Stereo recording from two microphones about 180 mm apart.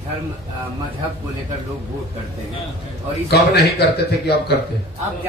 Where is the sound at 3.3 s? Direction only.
65° left (ahead or behind).